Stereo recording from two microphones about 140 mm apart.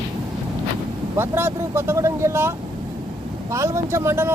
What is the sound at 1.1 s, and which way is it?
Speech, 15° right (ahead or behind).